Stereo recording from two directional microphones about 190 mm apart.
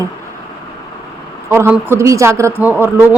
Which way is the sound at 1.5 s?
10° right (ahead or behind).